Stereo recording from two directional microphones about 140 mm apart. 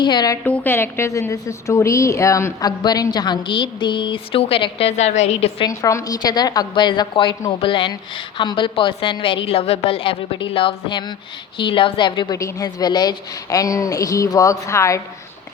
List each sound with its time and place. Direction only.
0.0 s a woman's voice: 30° left (ahead or behind)
0.4 s a woman's voice: 10° left (ahead or behind); by 5.6 s 50° left (ahead or behind)
5.6 s a woman's voice: 25° left (ahead or behind)
12.4 s a woman's voice: 25° left (ahead or behind)